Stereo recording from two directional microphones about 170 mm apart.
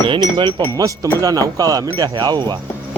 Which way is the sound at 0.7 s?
20° right (ahead or behind).